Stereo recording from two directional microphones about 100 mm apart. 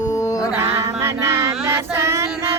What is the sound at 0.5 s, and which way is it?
Female singing, 30° right (ahead or behind).